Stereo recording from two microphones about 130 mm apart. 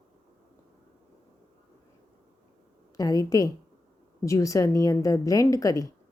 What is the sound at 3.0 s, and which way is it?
Speech, 30° left (ahead or behind).